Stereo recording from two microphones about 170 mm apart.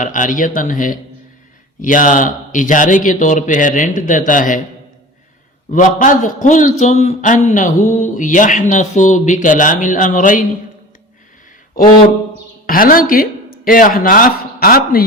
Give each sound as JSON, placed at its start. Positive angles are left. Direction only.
{"t": 0.0, "sound": "a man's voice", "side_deg": 50}
{"t": 5.7, "sound": "a man's voice", "side_deg": 50}
{"t": 11.8, "sound": "a man's voice", "side_deg": 55}